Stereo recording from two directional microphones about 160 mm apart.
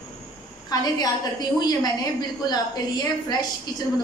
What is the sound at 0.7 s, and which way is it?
A woman's voice, 25° left (ahead or behind).